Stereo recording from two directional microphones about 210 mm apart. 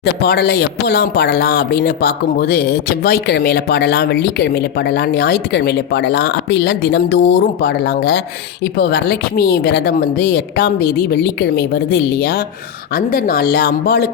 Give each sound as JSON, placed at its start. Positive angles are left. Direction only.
{"t": 0.0, "sound": "speech", "side_deg": 50}